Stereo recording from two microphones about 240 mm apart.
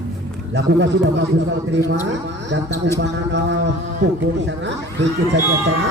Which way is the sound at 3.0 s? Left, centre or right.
Right.